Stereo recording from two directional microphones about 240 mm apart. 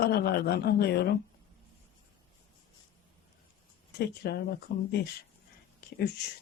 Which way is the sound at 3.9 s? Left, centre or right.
Left.